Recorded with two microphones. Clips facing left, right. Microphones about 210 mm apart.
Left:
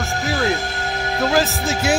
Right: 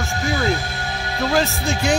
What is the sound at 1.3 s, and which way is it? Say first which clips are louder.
Speech: right 1 dB; centre (ahead or behind).